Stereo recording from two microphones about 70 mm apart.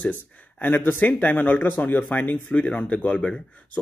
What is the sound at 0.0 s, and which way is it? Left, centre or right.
Speech, left.